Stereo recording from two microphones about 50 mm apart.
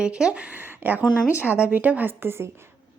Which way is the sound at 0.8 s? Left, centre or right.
Right.